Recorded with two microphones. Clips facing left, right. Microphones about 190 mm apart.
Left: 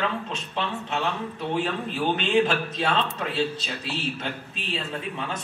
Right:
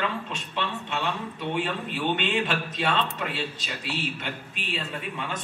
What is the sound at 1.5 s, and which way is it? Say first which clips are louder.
Speech: left 2 dB; 25° left (ahead or behind).